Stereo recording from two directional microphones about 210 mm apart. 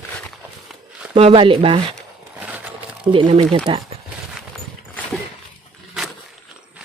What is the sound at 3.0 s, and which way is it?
Speech, 25° right (ahead or behind).